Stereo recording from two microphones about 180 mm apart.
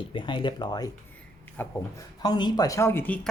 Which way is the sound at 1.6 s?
10° left (ahead or behind).